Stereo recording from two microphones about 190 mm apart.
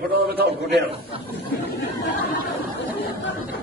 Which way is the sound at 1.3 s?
55° left (ahead or behind).